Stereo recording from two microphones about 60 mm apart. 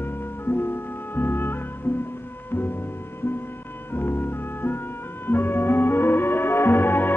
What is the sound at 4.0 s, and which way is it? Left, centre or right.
Music, left.